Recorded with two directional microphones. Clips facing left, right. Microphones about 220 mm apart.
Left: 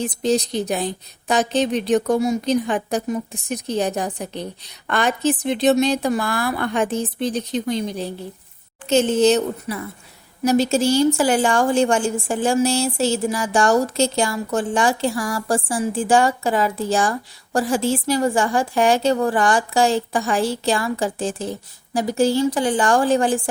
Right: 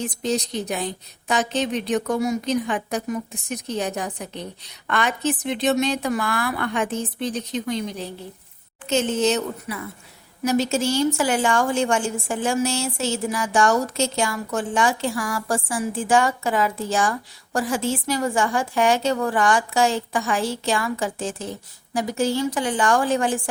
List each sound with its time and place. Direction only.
0.0 s a woman's voice: 30° left (ahead or behind)